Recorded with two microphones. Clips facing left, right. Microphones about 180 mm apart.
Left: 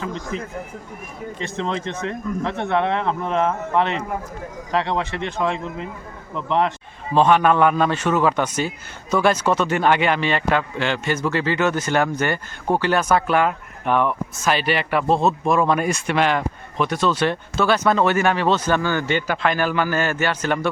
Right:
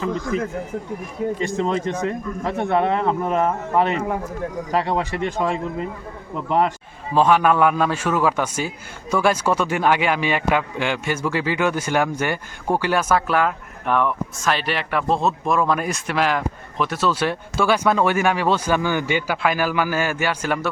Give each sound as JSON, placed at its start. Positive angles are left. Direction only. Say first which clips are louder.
{"t": 0.3, "sound": "speech", "louder": "right 7 dB", "side_deg": -45}
{"t": 1.4, "sound": "a man's voice", "louder": "even", "side_deg": -10}
{"t": 4.7, "sound": "speech", "louder": "even", "side_deg": -40}
{"t": 7.1, "sound": "a man's voice", "louder": "left 1 dB", "side_deg": -5}